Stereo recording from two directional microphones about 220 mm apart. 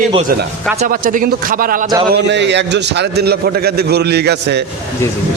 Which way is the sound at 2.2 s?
50° right (ahead or behind).